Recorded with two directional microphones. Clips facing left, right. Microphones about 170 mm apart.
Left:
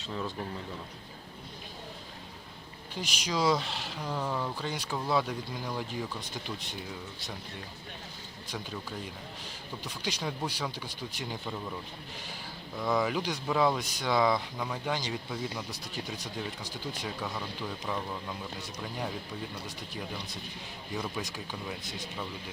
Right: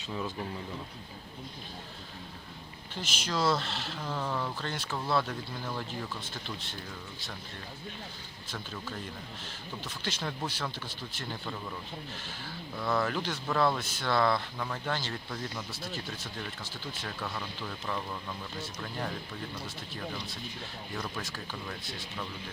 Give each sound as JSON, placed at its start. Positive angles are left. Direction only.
{"t": 0.1, "sound": "speech", "side_deg": -5}
{"t": 2.9, "sound": "speech", "side_deg": 10}
{"t": 8.5, "sound": "speech", "side_deg": 10}